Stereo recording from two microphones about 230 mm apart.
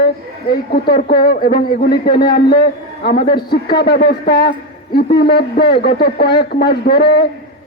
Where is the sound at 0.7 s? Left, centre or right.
Left.